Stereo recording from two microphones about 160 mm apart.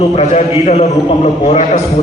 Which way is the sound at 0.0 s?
45° left (ahead or behind).